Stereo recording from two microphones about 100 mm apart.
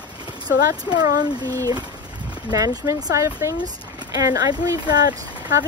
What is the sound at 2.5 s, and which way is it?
Speech, 35° right (ahead or behind).